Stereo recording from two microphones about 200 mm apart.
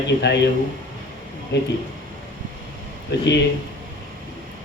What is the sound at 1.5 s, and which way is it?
Speech, 60° left (ahead or behind).